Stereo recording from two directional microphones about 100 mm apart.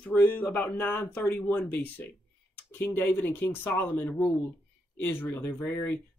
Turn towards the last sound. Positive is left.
turn(degrees=20)  # may be behind; listen again after turning